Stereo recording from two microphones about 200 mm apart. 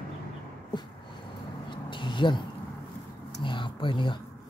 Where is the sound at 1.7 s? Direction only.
25° left (ahead or behind).